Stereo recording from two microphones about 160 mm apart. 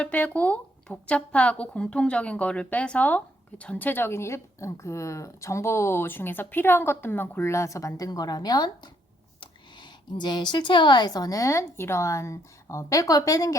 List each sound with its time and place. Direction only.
0.0 s speech: 10° left (ahead or behind)